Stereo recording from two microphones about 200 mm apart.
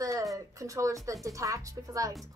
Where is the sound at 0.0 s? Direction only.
15° right (ahead or behind).